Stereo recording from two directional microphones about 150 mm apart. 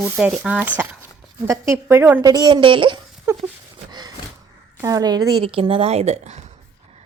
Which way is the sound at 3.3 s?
15° right (ahead or behind).